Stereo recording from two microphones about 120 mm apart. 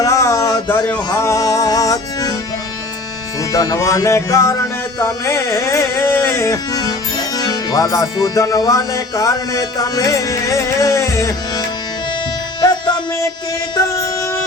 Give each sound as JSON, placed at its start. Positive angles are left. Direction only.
{"t": 0.0, "sound": "a sound", "side_deg": 25}
{"t": 1.2, "sound": "music", "side_deg": 25}
{"t": 3.5, "sound": "music", "side_deg": 30}
{"t": 12.6, "sound": "music", "side_deg": 40}